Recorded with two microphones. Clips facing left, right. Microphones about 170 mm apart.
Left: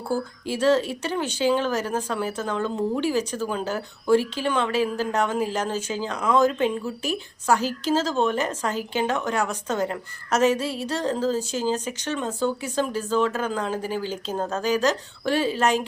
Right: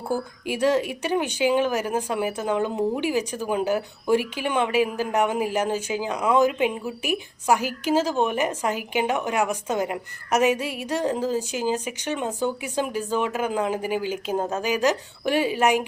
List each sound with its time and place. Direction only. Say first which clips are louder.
0.1 s a woman's voice: left 1 dB; 15° right (ahead or behind)